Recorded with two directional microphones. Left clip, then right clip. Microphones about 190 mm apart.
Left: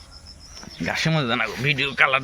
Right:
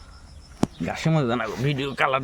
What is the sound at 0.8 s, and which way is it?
Speech, 10° right (ahead or behind).